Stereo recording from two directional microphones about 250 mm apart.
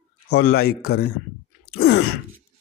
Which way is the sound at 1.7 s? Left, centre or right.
Left.